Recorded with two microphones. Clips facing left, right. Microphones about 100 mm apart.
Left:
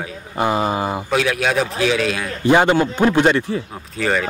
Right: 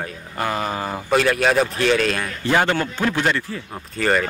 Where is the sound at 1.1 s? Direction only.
Centre (ahead or behind).